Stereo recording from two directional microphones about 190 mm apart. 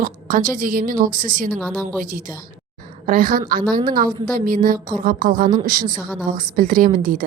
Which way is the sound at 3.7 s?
20° right (ahead or behind).